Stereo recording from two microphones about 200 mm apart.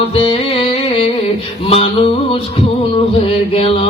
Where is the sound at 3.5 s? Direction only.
25° left (ahead or behind).